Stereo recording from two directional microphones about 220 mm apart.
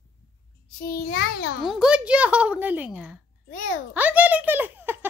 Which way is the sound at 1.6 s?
5° right (ahead or behind).